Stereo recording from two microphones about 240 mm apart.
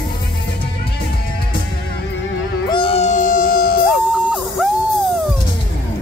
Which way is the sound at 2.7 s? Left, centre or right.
Left.